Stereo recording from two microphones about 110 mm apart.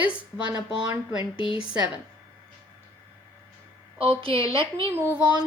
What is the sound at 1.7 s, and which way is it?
Speech, 15° right (ahead or behind).